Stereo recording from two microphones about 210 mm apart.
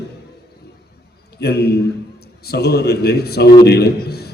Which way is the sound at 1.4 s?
50° left (ahead or behind).